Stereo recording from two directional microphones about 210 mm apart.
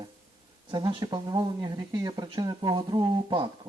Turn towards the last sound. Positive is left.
turn(degrees=-20)  # may be behind; listen again after turning